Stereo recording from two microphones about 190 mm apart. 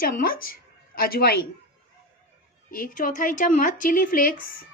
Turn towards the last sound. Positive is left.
turn(degrees=50)  # may be behind; listen again after turning